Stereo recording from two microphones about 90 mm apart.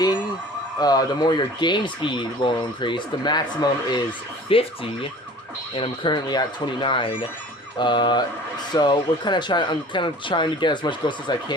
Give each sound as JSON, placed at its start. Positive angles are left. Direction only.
{"t": 0.8, "sound": "speech", "side_deg": 45}
{"t": 4.5, "sound": "speech", "side_deg": 90}
{"t": 5.7, "sound": "speech", "side_deg": 75}
{"t": 7.8, "sound": "speech", "side_deg": 60}